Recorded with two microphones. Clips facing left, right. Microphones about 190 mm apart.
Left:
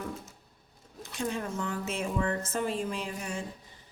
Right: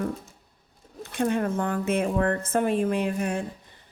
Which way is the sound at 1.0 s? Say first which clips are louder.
Right 8 dB; 60° right (ahead or behind).